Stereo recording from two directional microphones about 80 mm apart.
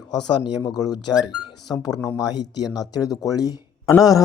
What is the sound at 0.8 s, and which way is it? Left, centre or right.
A man's voice, left.